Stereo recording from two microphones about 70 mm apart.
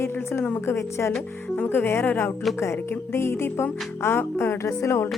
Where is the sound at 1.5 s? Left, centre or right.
Left.